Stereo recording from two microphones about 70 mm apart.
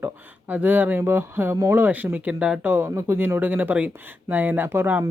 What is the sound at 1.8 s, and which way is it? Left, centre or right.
Speech, right.